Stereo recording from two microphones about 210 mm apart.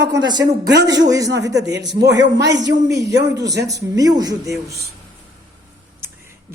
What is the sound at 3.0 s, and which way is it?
Speech, 55° right (ahead or behind).